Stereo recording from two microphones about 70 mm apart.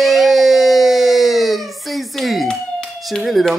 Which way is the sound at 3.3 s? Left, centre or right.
Centre.